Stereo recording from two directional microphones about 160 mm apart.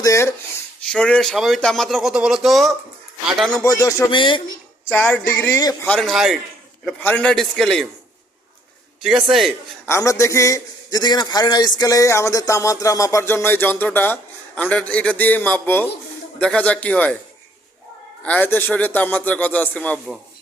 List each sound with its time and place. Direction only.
0.0 s a man's voice: 20° left (ahead or behind)
0.8 s speech: 5° left (ahead or behind)
3.6 s a man's voice: 20° left (ahead or behind)
4.1 s speech: 30° left (ahead or behind)
4.9 s a man's voice: 10° left (ahead or behind)
9.0 s speech: centre (ahead or behind)
9.8 s a man's voice: 20° left (ahead or behind)
18.2 s a man's voice: 10° left (ahead or behind)